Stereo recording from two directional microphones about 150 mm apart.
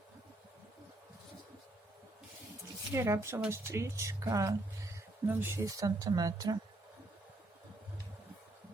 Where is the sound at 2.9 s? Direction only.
20° right (ahead or behind).